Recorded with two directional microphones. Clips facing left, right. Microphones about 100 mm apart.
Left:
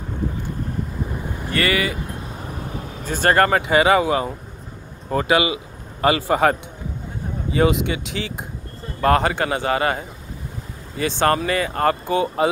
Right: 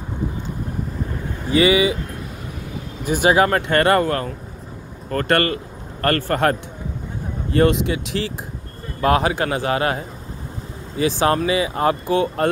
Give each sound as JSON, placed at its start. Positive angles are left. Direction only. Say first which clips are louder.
{"t": 1.5, "sound": "speech", "louder": "right 6 dB", "side_deg": -20}
{"t": 3.1, "sound": "a man's voice", "louder": "right 1 dB", "side_deg": -10}